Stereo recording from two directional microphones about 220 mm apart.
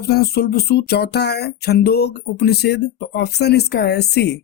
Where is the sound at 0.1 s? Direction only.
45° left (ahead or behind).